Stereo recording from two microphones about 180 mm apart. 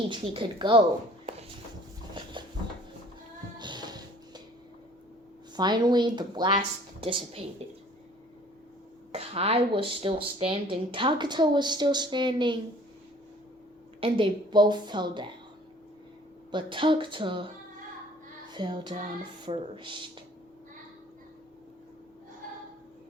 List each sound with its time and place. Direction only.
0.1 s speech: 25° right (ahead or behind)
3.6 s music: 25° right (ahead or behind)
5.5 s a woman's voice: 25° right (ahead or behind)
9.1 s speech: 35° right (ahead or behind)
14.0 s speech: 25° right (ahead or behind)
16.5 s speech: 25° right (ahead or behind)
18.5 s speech: 25° right (ahead or behind)